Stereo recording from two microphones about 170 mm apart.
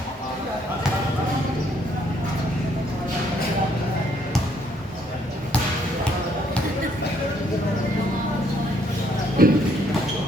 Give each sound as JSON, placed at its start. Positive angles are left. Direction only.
{"t": 9.4, "sound": "clip-clop", "side_deg": -60}